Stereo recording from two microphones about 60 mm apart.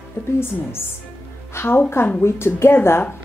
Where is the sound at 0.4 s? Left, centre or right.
Left.